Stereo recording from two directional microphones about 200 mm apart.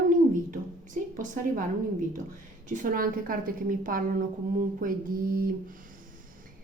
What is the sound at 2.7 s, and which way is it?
A woman's voice, 45° right (ahead or behind).